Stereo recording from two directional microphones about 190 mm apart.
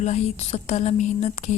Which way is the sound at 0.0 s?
35° left (ahead or behind).